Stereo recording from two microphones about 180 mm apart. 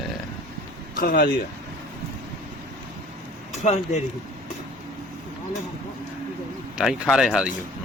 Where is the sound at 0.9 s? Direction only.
55° left (ahead or behind).